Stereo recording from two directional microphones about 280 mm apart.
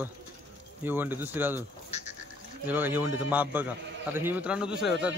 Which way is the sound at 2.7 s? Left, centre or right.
Centre.